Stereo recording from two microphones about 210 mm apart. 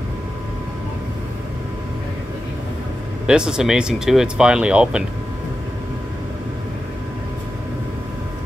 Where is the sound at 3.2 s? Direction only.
5° right (ahead or behind).